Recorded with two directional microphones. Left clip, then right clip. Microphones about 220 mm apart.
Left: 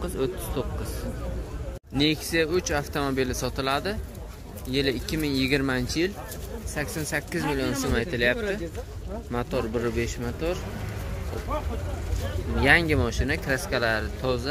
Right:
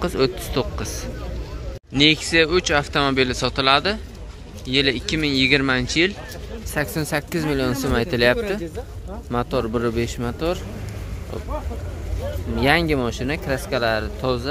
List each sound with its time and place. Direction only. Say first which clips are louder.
0.0 s speech: right 8 dB; 15° right (ahead or behind)
2.0 s speech: right 8 dB; 5° right (ahead or behind)
6.7 s speech: right 6 dB; 20° right (ahead or behind)
12.5 s speech: right 2 dB; 10° right (ahead or behind)